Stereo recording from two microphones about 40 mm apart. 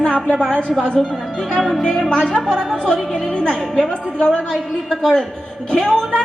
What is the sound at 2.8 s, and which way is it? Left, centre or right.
A woman's voice, centre.